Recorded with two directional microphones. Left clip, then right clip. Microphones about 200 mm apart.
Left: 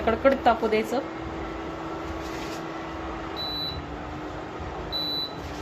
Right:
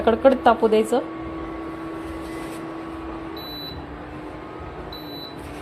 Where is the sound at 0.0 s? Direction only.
25° right (ahead or behind).